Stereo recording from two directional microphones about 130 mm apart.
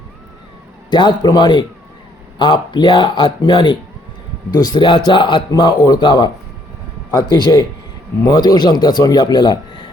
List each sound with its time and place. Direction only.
0.9 s speech: 35° left (ahead or behind)